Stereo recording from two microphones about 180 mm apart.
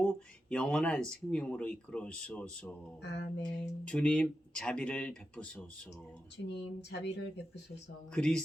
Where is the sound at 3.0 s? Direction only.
75° left (ahead or behind).